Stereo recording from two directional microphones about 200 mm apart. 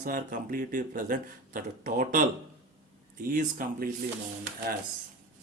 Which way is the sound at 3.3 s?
45° right (ahead or behind).